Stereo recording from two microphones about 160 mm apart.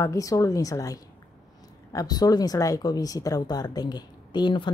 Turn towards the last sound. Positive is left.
turn(degrees=30)  # may be behind; listen again after turning